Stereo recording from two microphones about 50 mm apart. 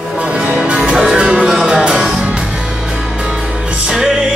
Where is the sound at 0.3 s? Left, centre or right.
Right.